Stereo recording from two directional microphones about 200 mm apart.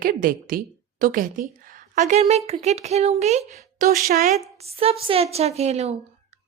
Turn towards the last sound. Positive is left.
turn(degrees=-30)  # may be behind; listen again after turning